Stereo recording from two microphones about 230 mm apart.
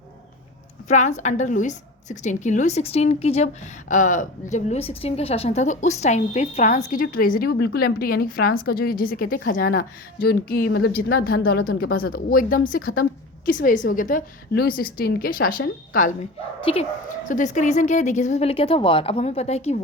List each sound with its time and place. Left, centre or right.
0.9 s a woman's voice: left